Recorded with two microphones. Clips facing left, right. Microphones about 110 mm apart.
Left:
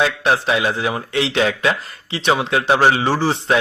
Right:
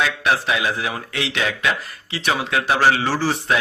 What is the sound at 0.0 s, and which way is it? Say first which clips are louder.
A man's voice: left 3 dB; 30° left (ahead or behind).